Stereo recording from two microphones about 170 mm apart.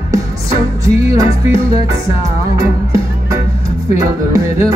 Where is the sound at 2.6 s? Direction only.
20° right (ahead or behind).